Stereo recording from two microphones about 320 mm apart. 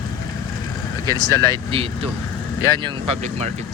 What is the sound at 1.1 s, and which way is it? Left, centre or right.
Speech, centre.